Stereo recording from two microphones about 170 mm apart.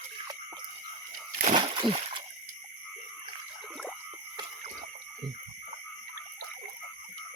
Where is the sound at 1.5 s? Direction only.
30° right (ahead or behind).